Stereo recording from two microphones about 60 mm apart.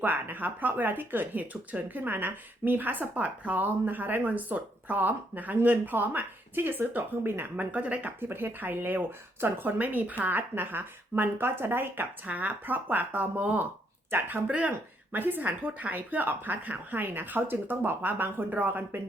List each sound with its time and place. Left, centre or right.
0.0 s speech: right
8.2 s speech: right